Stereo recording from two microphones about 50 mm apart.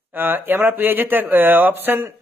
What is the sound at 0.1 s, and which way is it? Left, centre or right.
Speech, right.